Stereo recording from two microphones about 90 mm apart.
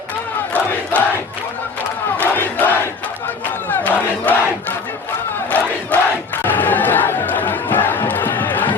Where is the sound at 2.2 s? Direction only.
20° left (ahead or behind).